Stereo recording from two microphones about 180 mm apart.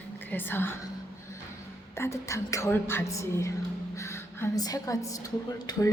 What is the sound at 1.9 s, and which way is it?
A woman's voice, 15° left (ahead or behind).